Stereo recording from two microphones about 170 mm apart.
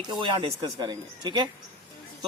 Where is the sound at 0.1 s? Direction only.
25° right (ahead or behind).